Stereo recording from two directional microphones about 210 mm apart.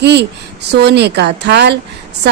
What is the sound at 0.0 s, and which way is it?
A woman's voice, 55° right (ahead or behind).